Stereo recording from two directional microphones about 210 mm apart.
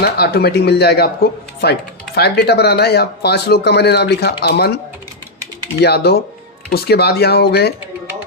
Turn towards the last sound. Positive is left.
turn(degrees=50)  # may be behind; listen again after turning